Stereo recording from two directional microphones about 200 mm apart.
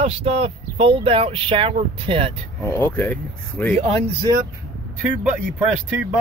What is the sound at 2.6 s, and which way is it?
Speech, 10° left (ahead or behind).